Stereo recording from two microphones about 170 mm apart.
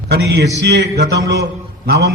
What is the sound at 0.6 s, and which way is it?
Speech, 85° right.